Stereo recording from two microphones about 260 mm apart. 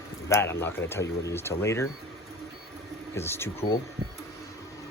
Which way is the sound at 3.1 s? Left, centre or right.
Centre.